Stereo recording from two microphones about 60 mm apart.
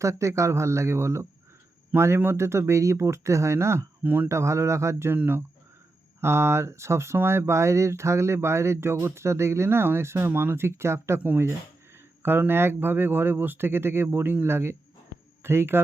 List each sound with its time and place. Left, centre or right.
0.0 s speech: right
4.0 s speech: right
4.3 s speech: right
5.1 s speech: right
6.1 s speech: right
12.2 s speech: right